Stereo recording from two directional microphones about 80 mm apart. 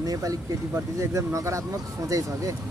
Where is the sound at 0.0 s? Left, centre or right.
Right.